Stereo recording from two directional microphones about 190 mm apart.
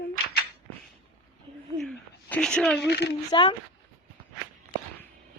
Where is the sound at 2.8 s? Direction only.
65° left (ahead or behind).